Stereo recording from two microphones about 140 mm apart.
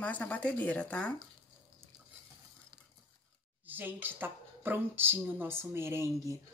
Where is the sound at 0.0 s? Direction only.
10° left (ahead or behind).